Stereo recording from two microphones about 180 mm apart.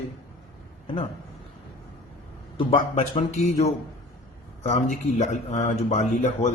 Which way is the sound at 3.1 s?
40° left (ahead or behind).